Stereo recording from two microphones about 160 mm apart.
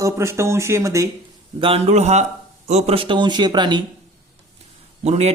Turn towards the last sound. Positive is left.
turn(degrees=-40)  # may be behind; listen again after turning